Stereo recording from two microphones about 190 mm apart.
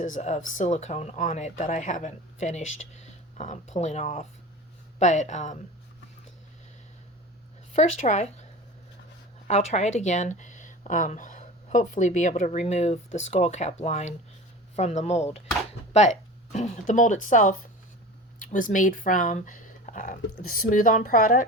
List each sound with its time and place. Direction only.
0.0 s speech: 40° left (ahead or behind)
7.8 s speech: 40° left (ahead or behind)
9.5 s speech: 35° left (ahead or behind)